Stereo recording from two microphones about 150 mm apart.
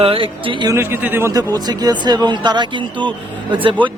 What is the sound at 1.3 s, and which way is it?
A man's voice, 25° right (ahead or behind).